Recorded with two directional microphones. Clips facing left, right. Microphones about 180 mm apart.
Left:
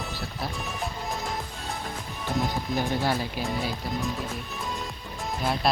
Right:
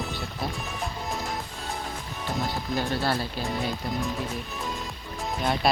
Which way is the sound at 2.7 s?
15° left (ahead or behind).